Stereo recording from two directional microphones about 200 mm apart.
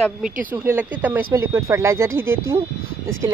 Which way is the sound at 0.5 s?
10° right (ahead or behind).